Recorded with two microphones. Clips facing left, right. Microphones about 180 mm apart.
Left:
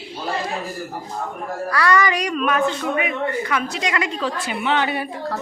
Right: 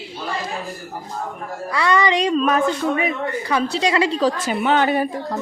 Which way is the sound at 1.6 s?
20° right (ahead or behind).